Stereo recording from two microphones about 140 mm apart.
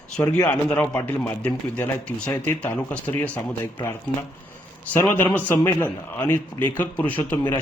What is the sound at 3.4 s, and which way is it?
Speech, 20° left (ahead or behind).